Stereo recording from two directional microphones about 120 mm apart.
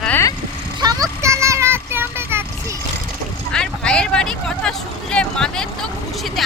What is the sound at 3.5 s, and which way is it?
Vehicle, 5° left (ahead or behind).